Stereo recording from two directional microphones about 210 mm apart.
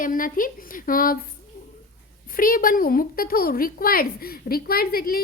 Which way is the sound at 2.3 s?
40° left (ahead or behind).